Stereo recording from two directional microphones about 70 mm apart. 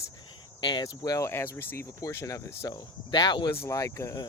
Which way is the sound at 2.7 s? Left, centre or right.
Left.